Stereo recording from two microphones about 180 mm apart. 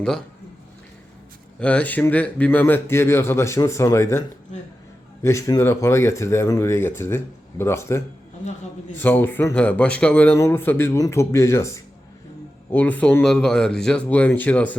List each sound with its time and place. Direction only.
1.5 s speech: 5° left (ahead or behind)
5.2 s speech: 15° left (ahead or behind)